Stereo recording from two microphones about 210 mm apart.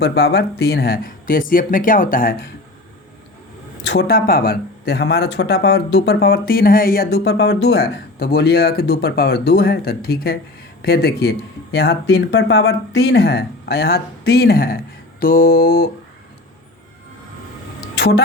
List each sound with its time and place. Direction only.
0.0 s speech: 50° left (ahead or behind)
3.8 s speech: 50° left (ahead or behind)
17.7 s music: 50° left (ahead or behind)